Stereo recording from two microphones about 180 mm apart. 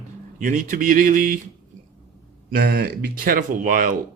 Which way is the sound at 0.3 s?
45° right (ahead or behind).